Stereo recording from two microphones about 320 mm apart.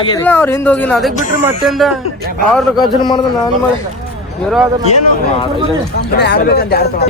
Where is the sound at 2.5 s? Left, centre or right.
Centre.